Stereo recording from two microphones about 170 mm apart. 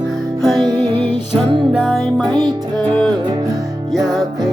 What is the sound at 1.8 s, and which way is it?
Music, centre (ahead or behind).